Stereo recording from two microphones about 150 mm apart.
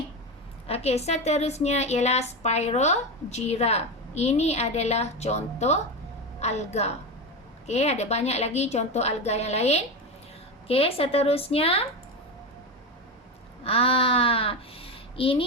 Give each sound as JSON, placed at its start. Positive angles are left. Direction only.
{"t": 0.7, "sound": "a woman's voice", "side_deg": 45}
{"t": 13.7, "sound": "a child's voice", "side_deg": 40}